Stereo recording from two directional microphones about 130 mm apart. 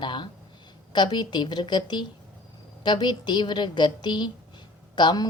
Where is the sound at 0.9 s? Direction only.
35° left (ahead or behind).